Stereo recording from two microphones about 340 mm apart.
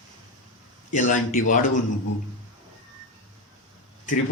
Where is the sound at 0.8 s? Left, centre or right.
Left.